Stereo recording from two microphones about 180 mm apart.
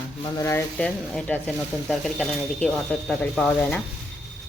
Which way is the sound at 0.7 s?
5° left (ahead or behind).